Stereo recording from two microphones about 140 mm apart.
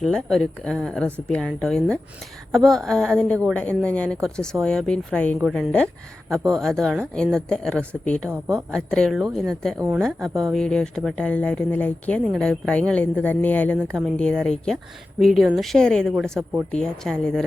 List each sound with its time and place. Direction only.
0.0 s speech: 5° left (ahead or behind)
8.3 s speech: 20° right (ahead or behind)
8.7 s speech: 5° left (ahead or behind)